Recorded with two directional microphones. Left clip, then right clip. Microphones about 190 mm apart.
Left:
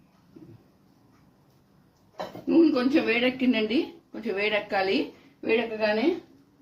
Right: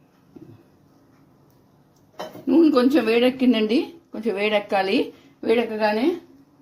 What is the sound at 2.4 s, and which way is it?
Speech, 45° right (ahead or behind).